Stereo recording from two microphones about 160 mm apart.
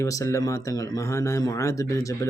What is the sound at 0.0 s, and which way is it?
Speech, 20° left (ahead or behind).